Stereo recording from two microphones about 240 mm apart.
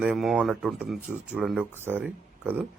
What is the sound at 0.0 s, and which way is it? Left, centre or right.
Speech, centre.